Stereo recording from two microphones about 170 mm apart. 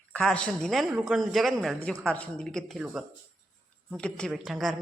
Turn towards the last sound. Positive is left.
turn(degrees=0)  # may be behind; listen again after turning